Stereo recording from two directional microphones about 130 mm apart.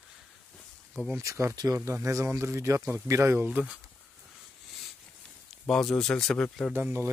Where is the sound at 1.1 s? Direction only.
20° right (ahead or behind).